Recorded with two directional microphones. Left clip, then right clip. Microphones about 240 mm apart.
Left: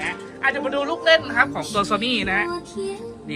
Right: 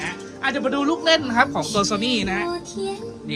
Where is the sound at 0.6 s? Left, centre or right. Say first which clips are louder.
Right 1 dB; right.